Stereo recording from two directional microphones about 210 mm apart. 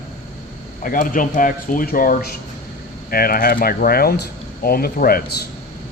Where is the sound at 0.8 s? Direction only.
40° left (ahead or behind).